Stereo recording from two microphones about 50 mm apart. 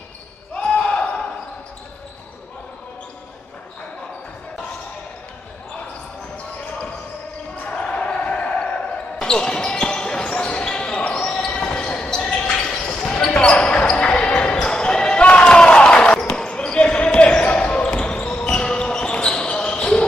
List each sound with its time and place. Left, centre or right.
0.6 s basketball bounce: left
7.7 s basketball bounce: centre